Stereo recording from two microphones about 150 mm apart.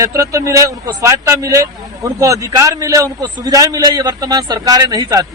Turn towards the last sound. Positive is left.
turn(degrees=-25)  # may be behind; listen again after turning